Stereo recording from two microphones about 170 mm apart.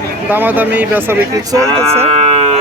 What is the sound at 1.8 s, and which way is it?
Cattle, 35° right (ahead or behind).